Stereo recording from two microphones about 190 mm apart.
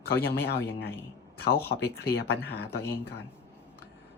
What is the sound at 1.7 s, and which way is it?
Speech, 60° left (ahead or behind).